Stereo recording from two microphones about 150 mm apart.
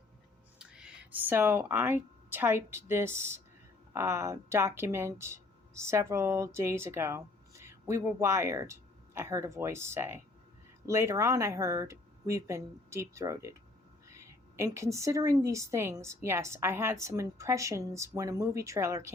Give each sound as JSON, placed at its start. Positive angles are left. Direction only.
{"t": 0.6, "sound": "a woman's voice", "side_deg": -5}